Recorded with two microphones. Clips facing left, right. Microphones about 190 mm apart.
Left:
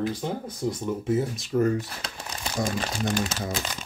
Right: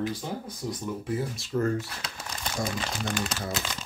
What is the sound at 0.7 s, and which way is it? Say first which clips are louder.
Speech: left 5 dB; 20° left (ahead or behind).